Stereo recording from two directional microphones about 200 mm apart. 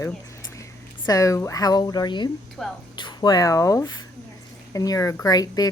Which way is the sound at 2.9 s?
20° left (ahead or behind).